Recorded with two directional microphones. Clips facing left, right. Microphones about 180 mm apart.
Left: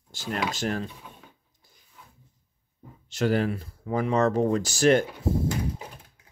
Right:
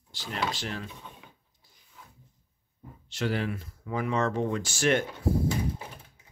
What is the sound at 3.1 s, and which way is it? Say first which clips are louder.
Speech: left 6 dB; 45° left (ahead or behind).